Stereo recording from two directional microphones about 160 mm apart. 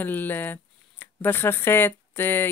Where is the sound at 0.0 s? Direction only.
10° left (ahead or behind).